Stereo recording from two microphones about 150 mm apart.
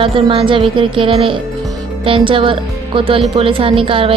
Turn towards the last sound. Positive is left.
turn(degrees=-35)  # may be behind; listen again after turning